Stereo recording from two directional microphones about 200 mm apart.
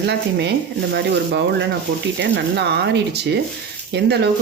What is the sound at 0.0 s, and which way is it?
Speech, 55° right (ahead or behind).